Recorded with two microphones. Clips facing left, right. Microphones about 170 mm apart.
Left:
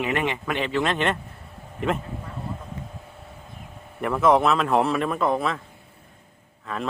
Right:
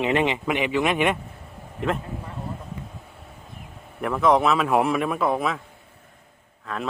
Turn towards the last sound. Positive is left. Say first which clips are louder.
# even
turn(degrees=0)  # may be behind; listen again after turning